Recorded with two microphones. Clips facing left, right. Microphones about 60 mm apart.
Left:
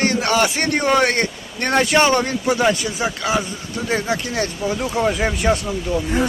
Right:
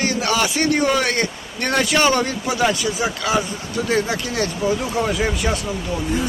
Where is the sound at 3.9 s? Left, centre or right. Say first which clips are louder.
Even; centre.